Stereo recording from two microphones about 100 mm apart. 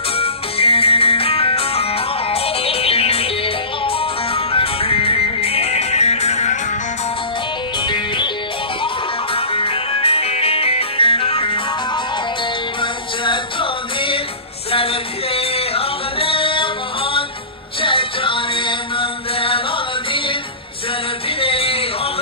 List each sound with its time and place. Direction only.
0.2 s music: 75° left (ahead or behind); by 6.4 s 90° left
9.3 s music: 65° left (ahead or behind)
12.8 s music: 55° left (ahead or behind)
21.4 s a sound: 70° left (ahead or behind)